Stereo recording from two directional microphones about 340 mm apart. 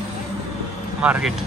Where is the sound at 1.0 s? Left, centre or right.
Centre.